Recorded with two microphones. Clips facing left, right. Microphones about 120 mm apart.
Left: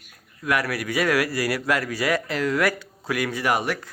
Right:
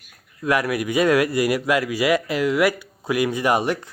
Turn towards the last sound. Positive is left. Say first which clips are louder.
# right 4 dB
turn(degrees=-20)  # may be behind; listen again after turning